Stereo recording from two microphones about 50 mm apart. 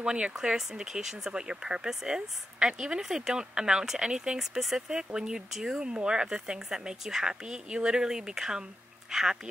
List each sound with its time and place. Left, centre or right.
0.0 s speech: centre